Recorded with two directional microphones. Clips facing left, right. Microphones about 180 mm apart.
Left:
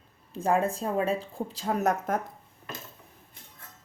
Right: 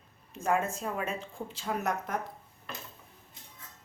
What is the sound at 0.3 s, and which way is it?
Speech, 35° left (ahead or behind).